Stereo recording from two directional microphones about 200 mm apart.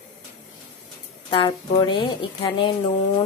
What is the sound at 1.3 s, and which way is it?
A woman's voice, 25° left (ahead or behind).